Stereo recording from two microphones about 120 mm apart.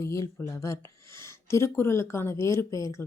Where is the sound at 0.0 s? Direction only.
25° left (ahead or behind).